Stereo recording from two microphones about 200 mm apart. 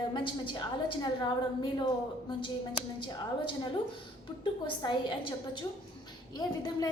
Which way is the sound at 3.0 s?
25° left (ahead or behind).